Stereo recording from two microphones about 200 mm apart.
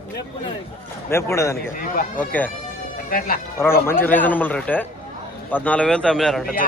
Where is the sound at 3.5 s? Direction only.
10° left (ahead or behind).